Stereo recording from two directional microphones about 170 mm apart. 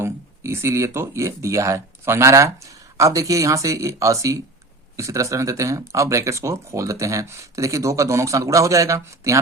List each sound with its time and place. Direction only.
0.0 s speech: 15° right (ahead or behind)